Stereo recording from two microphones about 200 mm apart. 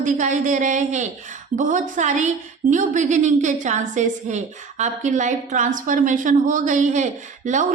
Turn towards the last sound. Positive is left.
turn(degrees=-40)  # may be behind; listen again after turning